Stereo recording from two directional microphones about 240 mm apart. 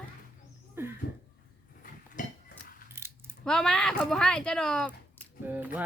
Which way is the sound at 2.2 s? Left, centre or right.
Left.